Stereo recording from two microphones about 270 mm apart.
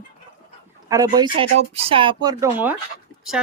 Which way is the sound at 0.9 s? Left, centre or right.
Centre.